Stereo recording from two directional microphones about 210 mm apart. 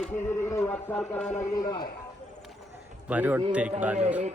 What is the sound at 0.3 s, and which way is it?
Speech, 15° left (ahead or behind).